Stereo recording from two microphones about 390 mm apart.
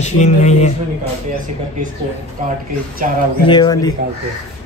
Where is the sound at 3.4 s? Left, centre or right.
Centre.